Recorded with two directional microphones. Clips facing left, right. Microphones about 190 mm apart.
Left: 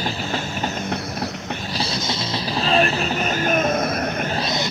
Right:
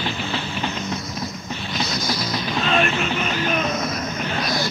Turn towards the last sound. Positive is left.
turn(degrees=25)  # may be behind; listen again after turning